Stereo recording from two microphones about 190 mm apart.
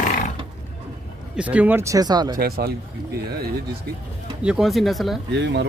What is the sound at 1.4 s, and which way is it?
Speech, 5° right (ahead or behind).